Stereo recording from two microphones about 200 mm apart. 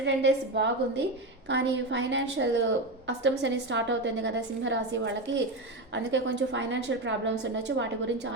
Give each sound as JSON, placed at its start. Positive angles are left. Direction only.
{"t": 0.0, "sound": "a woman's voice", "side_deg": -60}